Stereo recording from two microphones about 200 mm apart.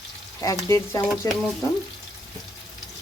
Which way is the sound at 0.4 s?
15° left (ahead or behind).